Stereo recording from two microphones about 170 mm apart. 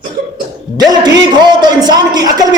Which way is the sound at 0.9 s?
25° right (ahead or behind).